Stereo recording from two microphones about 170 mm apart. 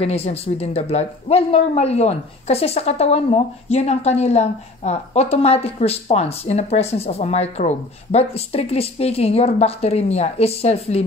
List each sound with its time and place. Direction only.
0.0 s speech: 35° left (ahead or behind)